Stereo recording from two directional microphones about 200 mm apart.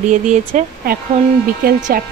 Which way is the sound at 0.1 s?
35° right (ahead or behind).